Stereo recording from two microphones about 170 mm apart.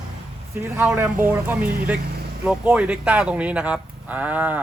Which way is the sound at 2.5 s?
10° right (ahead or behind).